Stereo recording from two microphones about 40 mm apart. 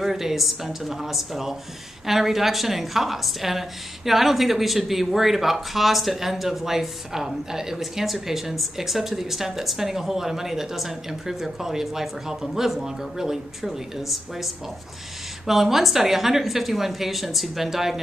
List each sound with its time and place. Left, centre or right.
0.0 s a woman's voice: centre